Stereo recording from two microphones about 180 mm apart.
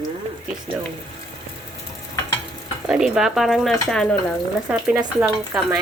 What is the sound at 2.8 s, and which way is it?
Speech, 5° right (ahead or behind).